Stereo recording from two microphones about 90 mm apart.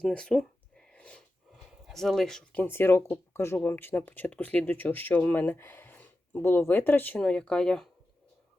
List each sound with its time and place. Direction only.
0.0 s a sound: 10° left (ahead or behind)
1.9 s speech: 5° left (ahead or behind)
2.6 s speech: 25° left (ahead or behind)
7.2 s speech: 10° left (ahead or behind)